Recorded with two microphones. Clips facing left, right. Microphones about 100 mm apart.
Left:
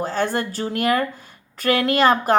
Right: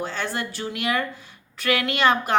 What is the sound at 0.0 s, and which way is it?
A woman's voice, 45° left (ahead or behind).